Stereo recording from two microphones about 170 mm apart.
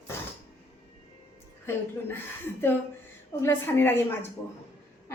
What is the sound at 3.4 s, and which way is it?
Speech, 15° left (ahead or behind).